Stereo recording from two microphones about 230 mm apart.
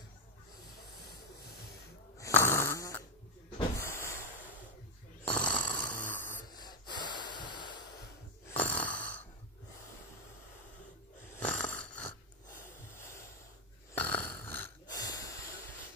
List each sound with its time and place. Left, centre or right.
2.1 s snoring: centre
3.5 s cupboard open or close: centre
5.3 s a sound: centre
6.1 s snort: centre
8.5 s snoring: centre
11.3 s snoring: centre
12.9 s a sound: centre
13.9 s snoring: centre
14.5 s wheeze: centre